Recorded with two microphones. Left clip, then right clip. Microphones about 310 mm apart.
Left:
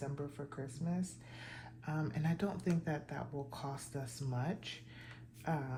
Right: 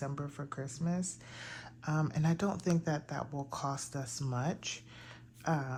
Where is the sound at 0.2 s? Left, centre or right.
Right.